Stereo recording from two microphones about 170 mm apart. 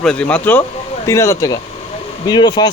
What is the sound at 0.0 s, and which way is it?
Speech, 5° left (ahead or behind).